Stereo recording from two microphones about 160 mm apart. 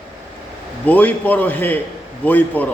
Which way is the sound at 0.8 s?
10° left (ahead or behind).